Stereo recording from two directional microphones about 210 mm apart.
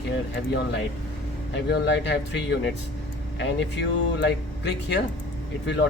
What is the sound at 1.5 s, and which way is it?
Speech, 55° left (ahead or behind).